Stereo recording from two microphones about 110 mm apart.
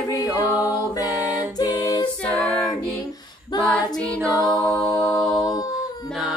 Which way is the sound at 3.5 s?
40° left (ahead or behind).